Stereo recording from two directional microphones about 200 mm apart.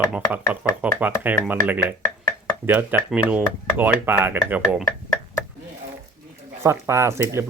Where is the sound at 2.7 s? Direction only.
10° right (ahead or behind).